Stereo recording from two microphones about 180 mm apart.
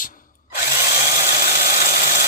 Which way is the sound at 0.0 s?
50° left (ahead or behind).